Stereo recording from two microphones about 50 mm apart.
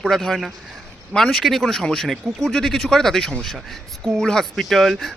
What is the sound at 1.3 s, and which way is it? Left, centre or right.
Speech, centre.